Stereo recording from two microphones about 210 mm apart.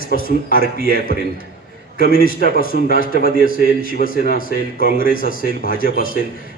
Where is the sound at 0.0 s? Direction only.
45° left (ahead or behind).